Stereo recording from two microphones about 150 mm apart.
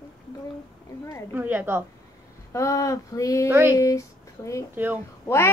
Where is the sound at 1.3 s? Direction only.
15° right (ahead or behind).